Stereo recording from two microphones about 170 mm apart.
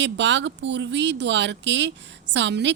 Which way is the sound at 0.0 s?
90° right.